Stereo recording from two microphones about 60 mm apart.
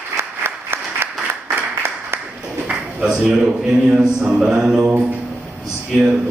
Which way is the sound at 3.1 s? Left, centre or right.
Centre.